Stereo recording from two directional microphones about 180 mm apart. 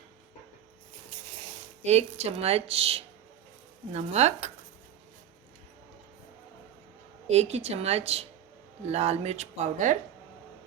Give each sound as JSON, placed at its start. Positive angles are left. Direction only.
{"t": 1.8, "sound": "speech", "side_deg": -35}
{"t": 7.3, "sound": "speech", "side_deg": -35}